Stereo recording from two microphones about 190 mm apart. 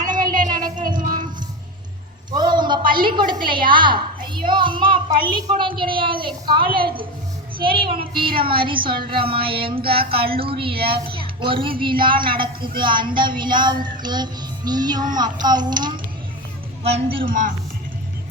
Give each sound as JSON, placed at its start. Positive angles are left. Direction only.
{"t": 0.2, "sound": "a sound", "side_deg": -45}
{"t": 0.6, "sound": "music", "side_deg": -20}
{"t": 0.9, "sound": "music", "side_deg": -45}
{"t": 2.3, "sound": "a sound", "side_deg": -25}
{"t": 3.4, "sound": "a child's voice", "side_deg": -25}
{"t": 5.5, "sound": "child singing", "side_deg": -25}
{"t": 16.8, "sound": "a woman's voice", "side_deg": -30}